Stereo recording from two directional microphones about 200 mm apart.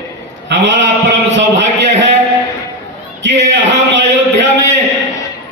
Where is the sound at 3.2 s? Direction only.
60° right (ahead or behind).